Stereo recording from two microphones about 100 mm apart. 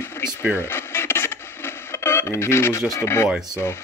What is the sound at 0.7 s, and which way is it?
Radio, 25° left (ahead or behind).